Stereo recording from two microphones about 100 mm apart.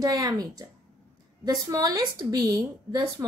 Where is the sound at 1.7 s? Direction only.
40° right (ahead or behind).